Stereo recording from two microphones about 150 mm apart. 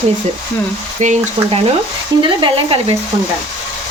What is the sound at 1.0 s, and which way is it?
Stir, 55° right (ahead or behind).